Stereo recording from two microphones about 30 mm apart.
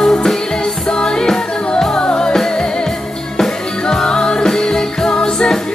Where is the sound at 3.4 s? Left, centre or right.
Centre.